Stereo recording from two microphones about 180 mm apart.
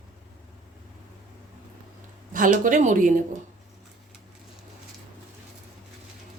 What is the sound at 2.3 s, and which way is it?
Speech, 45° right (ahead or behind).